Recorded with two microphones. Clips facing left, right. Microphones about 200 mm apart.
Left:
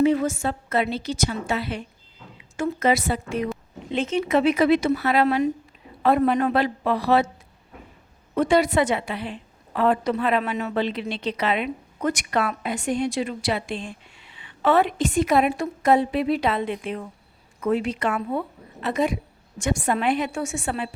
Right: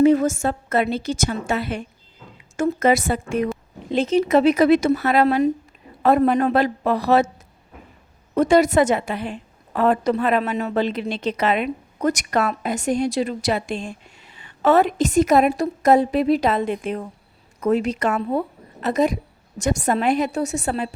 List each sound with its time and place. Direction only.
0.0 s a woman's voice: 45° right (ahead or behind)
3.9 s a woman's voice: 40° right (ahead or behind)
8.4 s a woman's voice: 45° right (ahead or behind)